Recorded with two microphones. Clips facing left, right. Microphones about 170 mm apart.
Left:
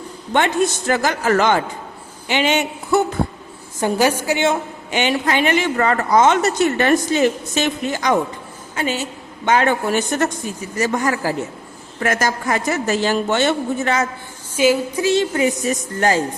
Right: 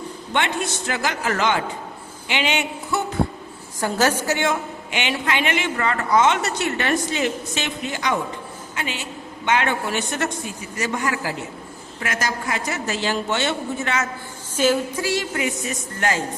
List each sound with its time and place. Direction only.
0.3 s a woman's voice: 45° left (ahead or behind)
2.2 s a sound: 45° left (ahead or behind)
3.8 s music: 15° left (ahead or behind)
4.9 s a woman's voice: 40° left (ahead or behind)
14.5 s music: 10° left (ahead or behind)
15.0 s a woman's voice: 25° left (ahead or behind)